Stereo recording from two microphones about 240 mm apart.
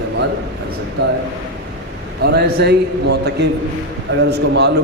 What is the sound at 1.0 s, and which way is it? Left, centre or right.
Speech, right.